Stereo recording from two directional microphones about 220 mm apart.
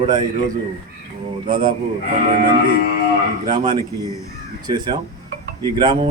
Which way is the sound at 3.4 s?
20° right (ahead or behind).